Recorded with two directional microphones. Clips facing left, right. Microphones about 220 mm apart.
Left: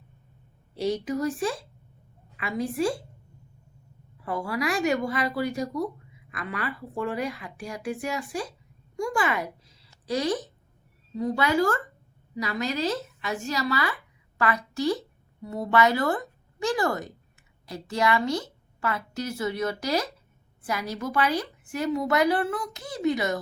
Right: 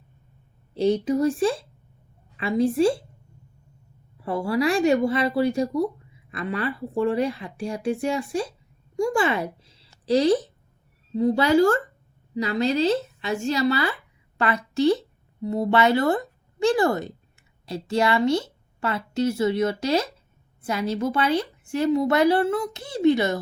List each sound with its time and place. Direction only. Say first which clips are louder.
0.8 s a woman's voice: right 6 dB; 30° right (ahead or behind)
4.2 s a woman's voice: right 6 dB; 30° right (ahead or behind)